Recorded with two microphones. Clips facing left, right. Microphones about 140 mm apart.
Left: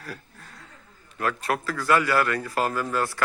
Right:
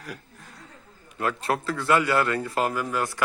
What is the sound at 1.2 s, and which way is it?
A man's voice, 25° right (ahead or behind).